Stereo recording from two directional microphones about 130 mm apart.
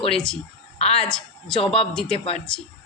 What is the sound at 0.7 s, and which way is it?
Speech, 50° left (ahead or behind).